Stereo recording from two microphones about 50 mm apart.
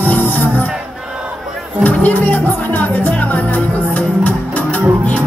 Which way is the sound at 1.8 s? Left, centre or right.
Left.